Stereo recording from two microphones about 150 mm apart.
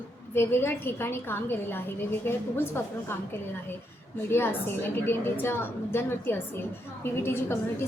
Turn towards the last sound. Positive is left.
turn(degrees=15)  # may be behind; listen again after turning